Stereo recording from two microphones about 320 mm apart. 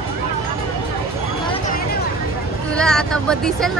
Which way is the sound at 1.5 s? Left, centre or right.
Left.